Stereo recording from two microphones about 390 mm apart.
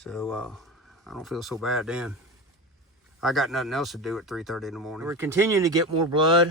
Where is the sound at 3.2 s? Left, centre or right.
Centre.